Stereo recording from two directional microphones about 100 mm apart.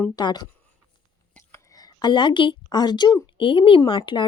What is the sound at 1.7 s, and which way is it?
A woman's voice, 40° left (ahead or behind).